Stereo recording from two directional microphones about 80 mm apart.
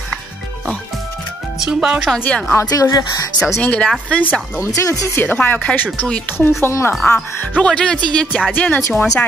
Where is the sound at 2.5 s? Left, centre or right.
Left.